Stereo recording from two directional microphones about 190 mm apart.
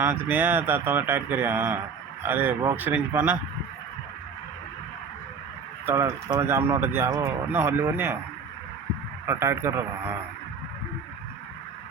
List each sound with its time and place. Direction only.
0.0 s speech: 10° right (ahead or behind)
5.8 s speech: 15° right (ahead or behind)
9.2 s speech: 15° right (ahead or behind)